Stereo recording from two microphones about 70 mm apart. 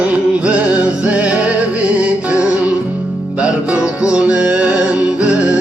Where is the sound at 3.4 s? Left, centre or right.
Centre.